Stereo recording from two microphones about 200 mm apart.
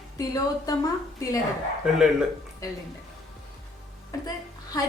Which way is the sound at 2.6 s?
15° left (ahead or behind).